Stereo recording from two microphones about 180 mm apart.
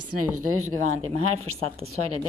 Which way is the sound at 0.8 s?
40° right (ahead or behind).